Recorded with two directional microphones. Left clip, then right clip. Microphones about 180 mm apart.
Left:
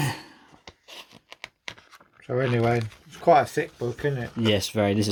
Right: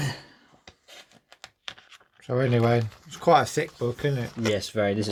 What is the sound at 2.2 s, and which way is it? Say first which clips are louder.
Speech: even; 15° right (ahead or behind).